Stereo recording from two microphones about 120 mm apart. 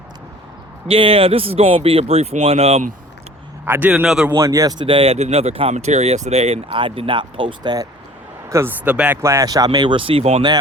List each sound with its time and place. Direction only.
0.9 s speech: 50° right (ahead or behind)
3.7 s a man's voice: 15° right (ahead or behind)
4.4 s speech: 25° right (ahead or behind)
4.9 s speech: 55° right (ahead or behind)
5.7 s speech: 70° right (ahead or behind)
6.7 s speech: 45° right (ahead or behind)
8.4 s speech: 25° right (ahead or behind)
8.8 s a man's voice: 10° right (ahead or behind)
9.2 s speech: 25° right (ahead or behind); by 10.4 s 60° right (ahead or behind)